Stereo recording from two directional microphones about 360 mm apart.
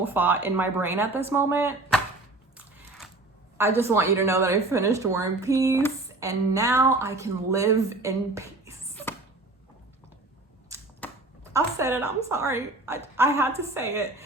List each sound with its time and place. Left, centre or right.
0.0 s speech: centre
3.6 s speech: centre
11.0 s a sound: centre
11.5 s speech: centre